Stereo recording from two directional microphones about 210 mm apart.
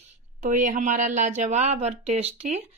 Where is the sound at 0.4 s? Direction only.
40° right (ahead or behind).